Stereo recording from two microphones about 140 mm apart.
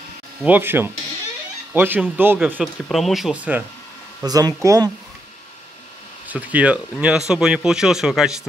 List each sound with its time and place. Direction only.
0.4 s speech: 15° right (ahead or behind)
4.2 s speech: 25° right (ahead or behind)
6.2 s speech: 10° right (ahead or behind)